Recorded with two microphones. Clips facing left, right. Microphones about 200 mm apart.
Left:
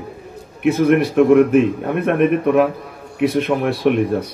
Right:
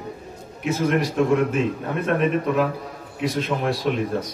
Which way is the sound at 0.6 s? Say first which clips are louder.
Left 7 dB; 60° left (ahead or behind).